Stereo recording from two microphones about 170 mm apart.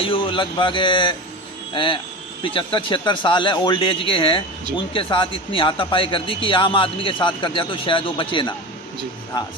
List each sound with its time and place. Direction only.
0.0 s speech: 30° left (ahead or behind)